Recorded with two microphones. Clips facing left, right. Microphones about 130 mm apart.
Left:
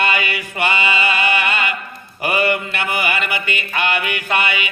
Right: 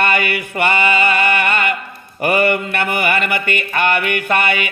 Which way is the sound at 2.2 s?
50° right (ahead or behind).